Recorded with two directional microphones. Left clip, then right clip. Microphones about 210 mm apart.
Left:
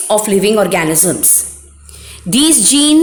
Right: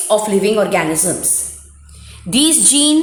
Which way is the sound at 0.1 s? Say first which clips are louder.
Left 2 dB; 40° left (ahead or behind).